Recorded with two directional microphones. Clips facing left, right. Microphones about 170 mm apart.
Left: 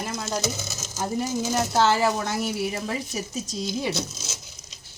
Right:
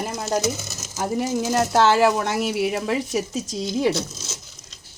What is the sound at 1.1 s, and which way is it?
Speech, 80° right.